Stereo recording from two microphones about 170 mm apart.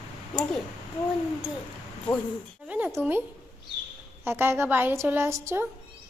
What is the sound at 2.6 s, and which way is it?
A woman's voice, 10° right (ahead or behind).